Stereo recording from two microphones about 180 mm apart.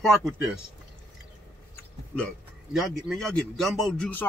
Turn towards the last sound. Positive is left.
turn(degrees=5)  # may be behind; listen again after turning